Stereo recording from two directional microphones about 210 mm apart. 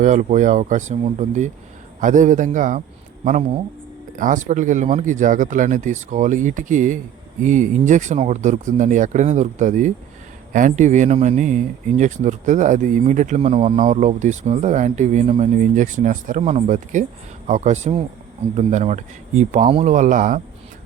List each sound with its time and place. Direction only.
0.0 s speech: 35° right (ahead or behind)
4.2 s speech: 35° right (ahead or behind)